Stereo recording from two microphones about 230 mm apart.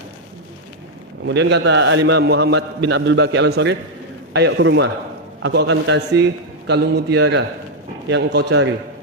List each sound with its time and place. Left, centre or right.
1.3 s a man's voice: right